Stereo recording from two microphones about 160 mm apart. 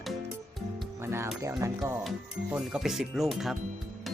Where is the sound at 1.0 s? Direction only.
15° right (ahead or behind).